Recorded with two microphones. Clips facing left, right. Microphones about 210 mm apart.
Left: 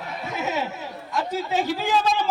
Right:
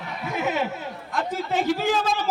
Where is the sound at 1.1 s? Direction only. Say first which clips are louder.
Left 1 dB; 50° right (ahead or behind).